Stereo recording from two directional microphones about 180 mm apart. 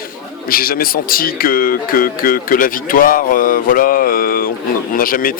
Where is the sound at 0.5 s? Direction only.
55° left (ahead or behind).